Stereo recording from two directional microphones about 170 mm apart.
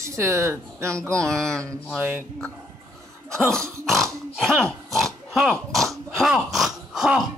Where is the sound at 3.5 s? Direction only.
5° left (ahead or behind).